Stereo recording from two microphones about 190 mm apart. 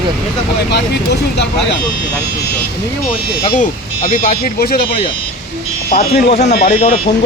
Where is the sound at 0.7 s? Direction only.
60° left (ahead or behind).